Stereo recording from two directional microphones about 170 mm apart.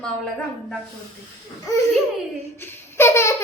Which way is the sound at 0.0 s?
5° left (ahead or behind).